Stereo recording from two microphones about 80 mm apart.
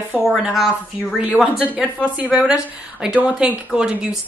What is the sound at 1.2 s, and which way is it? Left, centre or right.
A woman's voice, centre.